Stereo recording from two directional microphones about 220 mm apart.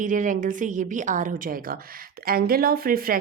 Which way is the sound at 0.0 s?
35° right (ahead or behind).